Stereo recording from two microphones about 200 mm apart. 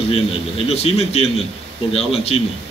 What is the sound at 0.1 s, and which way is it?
A man's voice, 30° left (ahead or behind).